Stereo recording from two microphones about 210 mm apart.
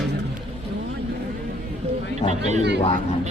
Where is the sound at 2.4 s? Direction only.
35° right (ahead or behind).